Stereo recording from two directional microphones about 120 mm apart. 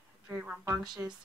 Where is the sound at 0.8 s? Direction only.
35° right (ahead or behind).